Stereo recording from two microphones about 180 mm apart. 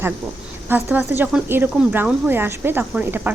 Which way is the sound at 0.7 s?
10° right (ahead or behind).